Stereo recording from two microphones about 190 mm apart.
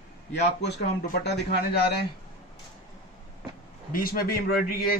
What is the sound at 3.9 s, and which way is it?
A man's voice, 50° left (ahead or behind).